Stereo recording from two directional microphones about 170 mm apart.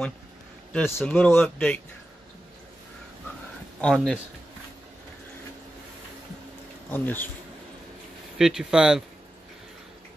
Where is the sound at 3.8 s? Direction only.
5° left (ahead or behind).